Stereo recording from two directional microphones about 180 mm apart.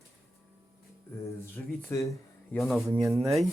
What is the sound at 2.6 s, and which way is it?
Speech, centre (ahead or behind).